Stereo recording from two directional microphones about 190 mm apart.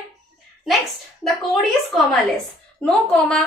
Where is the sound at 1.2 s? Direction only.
Centre (ahead or behind).